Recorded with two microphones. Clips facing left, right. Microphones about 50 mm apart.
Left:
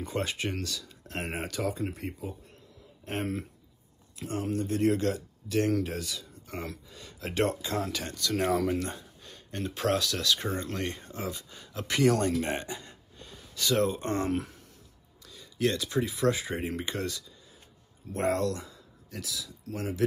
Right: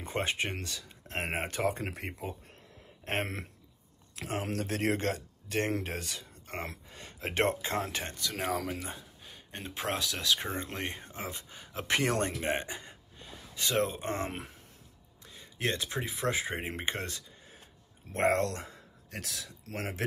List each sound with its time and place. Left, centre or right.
0.0 s speech: right
1.7 s speech: right
4.1 s speech: right
8.2 s speech: centre
11.9 s a man's voice: right